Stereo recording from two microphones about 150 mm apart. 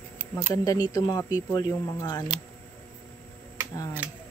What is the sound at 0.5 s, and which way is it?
Speech, 25° left (ahead or behind).